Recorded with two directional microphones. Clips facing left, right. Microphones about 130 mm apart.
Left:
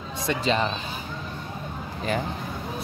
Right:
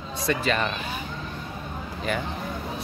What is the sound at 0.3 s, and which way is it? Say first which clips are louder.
Speech: left 1 dB; 20° left (ahead or behind).